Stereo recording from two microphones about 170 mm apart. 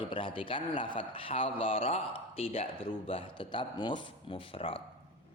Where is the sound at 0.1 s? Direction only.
30° left (ahead or behind).